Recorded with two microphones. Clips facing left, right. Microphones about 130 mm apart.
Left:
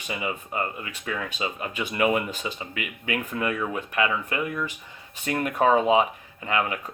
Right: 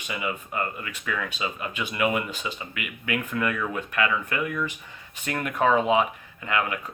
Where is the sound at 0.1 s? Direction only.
30° left (ahead or behind).